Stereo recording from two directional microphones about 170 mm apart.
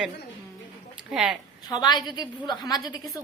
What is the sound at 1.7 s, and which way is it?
Speech, 25° left (ahead or behind).